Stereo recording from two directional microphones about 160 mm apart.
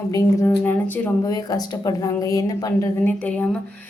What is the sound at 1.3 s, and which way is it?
Speech, 25° left (ahead or behind).